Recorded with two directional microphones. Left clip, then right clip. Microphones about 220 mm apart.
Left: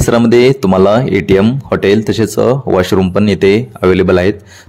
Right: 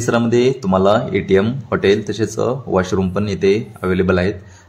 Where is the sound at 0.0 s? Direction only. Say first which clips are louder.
Left 7 dB; 35° left (ahead or behind).